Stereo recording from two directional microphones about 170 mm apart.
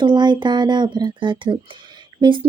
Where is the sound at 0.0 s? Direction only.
25° right (ahead or behind).